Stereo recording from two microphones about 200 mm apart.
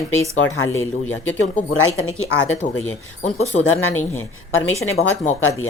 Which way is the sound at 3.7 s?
90° left.